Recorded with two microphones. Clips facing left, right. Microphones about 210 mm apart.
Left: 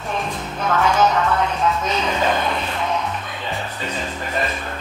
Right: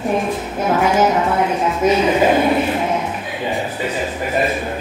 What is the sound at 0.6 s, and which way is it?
Speech, 15° right (ahead or behind).